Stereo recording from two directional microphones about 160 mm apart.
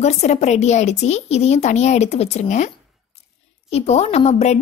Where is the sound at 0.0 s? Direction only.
45° left (ahead or behind).